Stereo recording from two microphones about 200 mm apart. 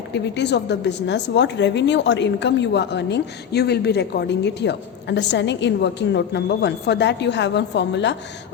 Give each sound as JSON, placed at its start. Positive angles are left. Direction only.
{"t": 0.1, "sound": "a woman's voice", "side_deg": 60}